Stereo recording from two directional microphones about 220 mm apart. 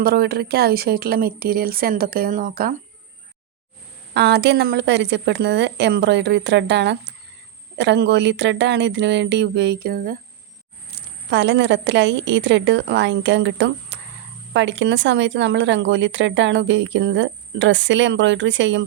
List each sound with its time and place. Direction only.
0.0 s a woman's voice: 45° right (ahead or behind)
4.1 s a woman's voice: 45° right (ahead or behind)
10.9 s a woman's voice: 50° right (ahead or behind)
13.9 s a sound: 55° right (ahead or behind)
14.5 s speech: 55° right (ahead or behind)